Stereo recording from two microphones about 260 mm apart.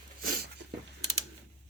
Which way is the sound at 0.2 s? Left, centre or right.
Right.